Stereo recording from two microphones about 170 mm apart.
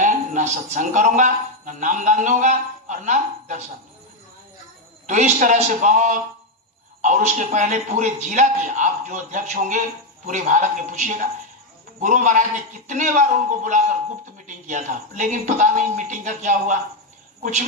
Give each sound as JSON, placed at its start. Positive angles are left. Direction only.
{"t": 0.0, "sound": "a man's voice", "side_deg": -50}
{"t": 5.0, "sound": "a man's voice", "side_deg": -45}